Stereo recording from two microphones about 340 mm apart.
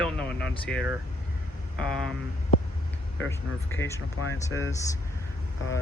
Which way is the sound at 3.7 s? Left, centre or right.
Centre.